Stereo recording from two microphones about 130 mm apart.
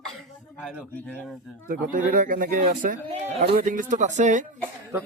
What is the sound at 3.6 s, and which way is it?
Speech, 90° right.